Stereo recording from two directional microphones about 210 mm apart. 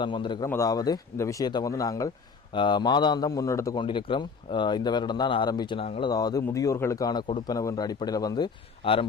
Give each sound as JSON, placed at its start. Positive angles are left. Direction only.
{"t": 0.0, "sound": "a man's voice", "side_deg": 20}